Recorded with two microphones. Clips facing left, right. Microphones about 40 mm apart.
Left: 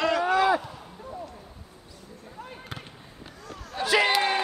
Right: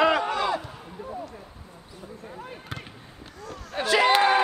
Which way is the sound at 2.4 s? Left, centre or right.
Centre.